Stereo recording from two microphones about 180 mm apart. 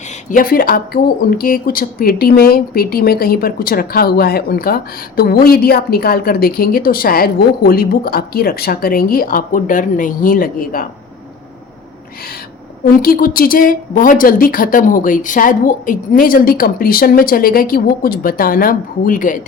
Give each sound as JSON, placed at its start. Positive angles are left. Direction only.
{"t": 0.3, "sound": "speech", "side_deg": 50}
{"t": 12.8, "sound": "a woman's voice", "side_deg": 55}